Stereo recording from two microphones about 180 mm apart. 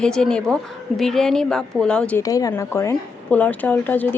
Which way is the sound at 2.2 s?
20° left (ahead or behind).